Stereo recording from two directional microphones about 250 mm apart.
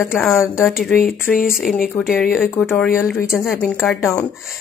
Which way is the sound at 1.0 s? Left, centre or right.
Left.